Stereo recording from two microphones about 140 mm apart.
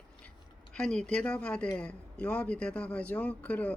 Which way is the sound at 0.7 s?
5° left (ahead or behind).